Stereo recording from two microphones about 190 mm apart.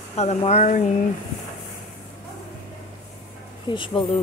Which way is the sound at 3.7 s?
25° left (ahead or behind).